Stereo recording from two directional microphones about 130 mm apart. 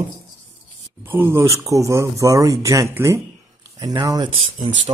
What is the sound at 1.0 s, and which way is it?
Speech, 15° right (ahead or behind).